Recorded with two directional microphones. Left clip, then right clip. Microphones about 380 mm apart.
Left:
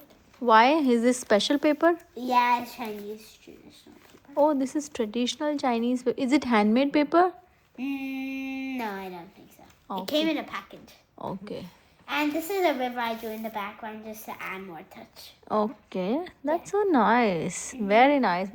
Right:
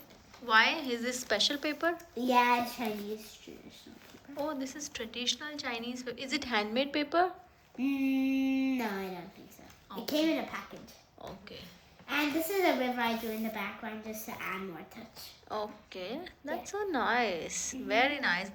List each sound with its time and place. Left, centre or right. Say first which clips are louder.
0.4 s a woman's voice: left 8 dB; centre
4.4 s a woman's voice: left 10 dB; centre
15.5 s a woman's voice: left 11 dB; centre